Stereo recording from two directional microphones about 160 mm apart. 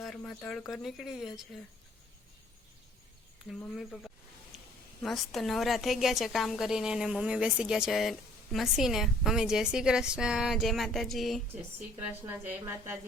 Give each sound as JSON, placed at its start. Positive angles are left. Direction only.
{"t": 0.0, "sound": "a woman's voice", "side_deg": 5}
{"t": 3.8, "sound": "a woman's voice", "side_deg": 5}
{"t": 11.5, "sound": "a woman's voice", "side_deg": -10}